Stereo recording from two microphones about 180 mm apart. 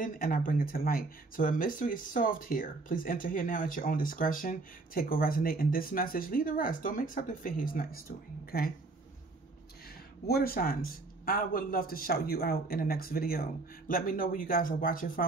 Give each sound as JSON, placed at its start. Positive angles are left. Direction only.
{"t": 0.0, "sound": "speech", "side_deg": 50}
{"t": 10.2, "sound": "speech", "side_deg": 60}